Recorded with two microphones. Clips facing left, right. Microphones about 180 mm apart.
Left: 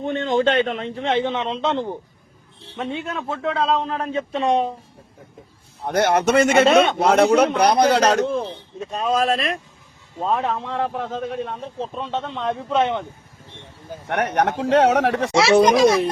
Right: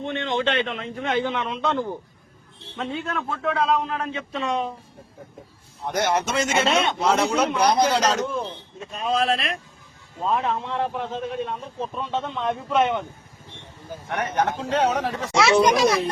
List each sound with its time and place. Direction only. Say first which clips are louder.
0.0 s a man's voice: left 5 dB; 40° left (ahead or behind)
5.8 s a man's voice: left 5 dB; 55° left (ahead or behind)
8.9 s a man's voice: left 3 dB; 40° left (ahead or behind)
11.8 s a man's voice: left 1 dB; 25° left (ahead or behind)
14.1 s a man's voice: left 4 dB; 70° left (ahead or behind)